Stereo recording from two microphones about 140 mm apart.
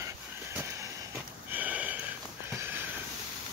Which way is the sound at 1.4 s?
10° right (ahead or behind).